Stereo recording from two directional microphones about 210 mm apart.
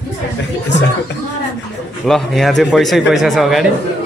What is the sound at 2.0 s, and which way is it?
Speech, centre (ahead or behind).